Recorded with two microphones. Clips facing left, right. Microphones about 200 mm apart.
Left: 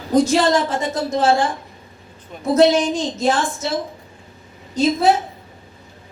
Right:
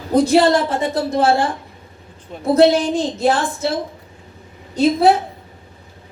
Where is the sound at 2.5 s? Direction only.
60° right (ahead or behind).